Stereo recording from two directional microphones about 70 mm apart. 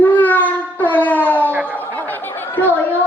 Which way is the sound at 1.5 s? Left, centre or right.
Right.